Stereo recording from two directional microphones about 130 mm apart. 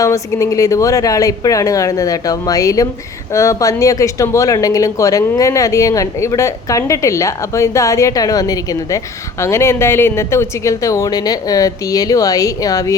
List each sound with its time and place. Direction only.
0.0 s speech: 25° left (ahead or behind)